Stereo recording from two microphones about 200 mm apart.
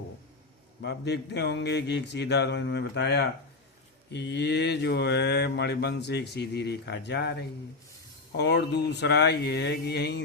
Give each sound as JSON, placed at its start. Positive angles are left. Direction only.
{"t": 0.8, "sound": "mantra", "side_deg": 55}